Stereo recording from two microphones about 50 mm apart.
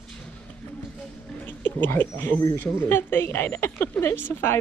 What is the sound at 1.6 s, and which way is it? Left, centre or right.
Speech, left.